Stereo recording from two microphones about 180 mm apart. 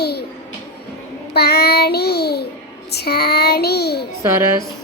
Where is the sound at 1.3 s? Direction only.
65° left (ahead or behind).